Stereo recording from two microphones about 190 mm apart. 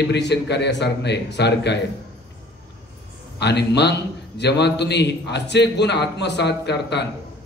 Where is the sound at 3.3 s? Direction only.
60° left (ahead or behind).